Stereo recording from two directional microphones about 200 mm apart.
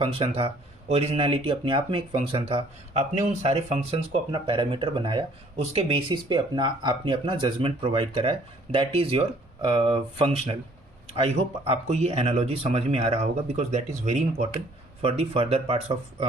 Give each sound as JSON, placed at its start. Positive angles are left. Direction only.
{"t": 0.0, "sound": "speech", "side_deg": -30}